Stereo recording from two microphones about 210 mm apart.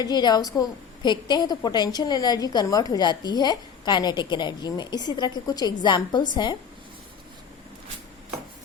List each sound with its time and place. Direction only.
0.0 s a woman's voice: 20° left (ahead or behind)